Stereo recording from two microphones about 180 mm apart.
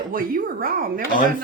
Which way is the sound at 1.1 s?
50° left (ahead or behind).